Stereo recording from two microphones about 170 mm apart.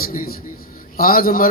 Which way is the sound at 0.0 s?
55° left (ahead or behind).